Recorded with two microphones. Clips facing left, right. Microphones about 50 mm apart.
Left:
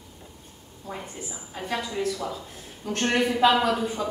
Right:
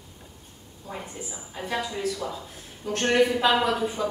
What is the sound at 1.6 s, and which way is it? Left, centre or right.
A woman's voice, centre.